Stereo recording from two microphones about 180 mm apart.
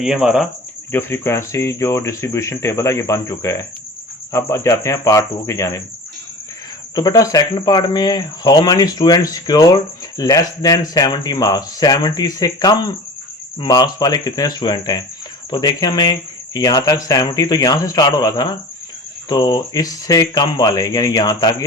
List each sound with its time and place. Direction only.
0.0 s speech: centre (ahead or behind)
0.9 s speech: 15° left (ahead or behind)
6.9 s speech: 20° left (ahead or behind)